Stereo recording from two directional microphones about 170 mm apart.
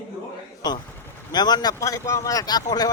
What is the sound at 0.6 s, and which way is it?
Speech, 25° left (ahead or behind).